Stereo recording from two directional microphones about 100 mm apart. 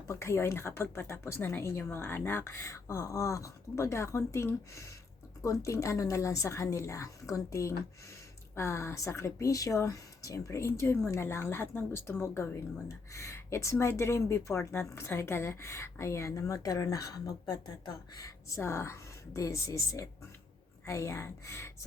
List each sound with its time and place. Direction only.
0.1 s a woman's voice: 25° left (ahead or behind)